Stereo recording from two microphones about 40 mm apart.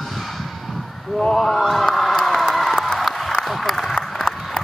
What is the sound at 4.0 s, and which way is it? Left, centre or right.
Applause, centre.